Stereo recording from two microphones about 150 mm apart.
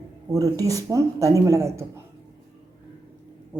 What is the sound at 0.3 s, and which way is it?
Speech, 25° right (ahead or behind).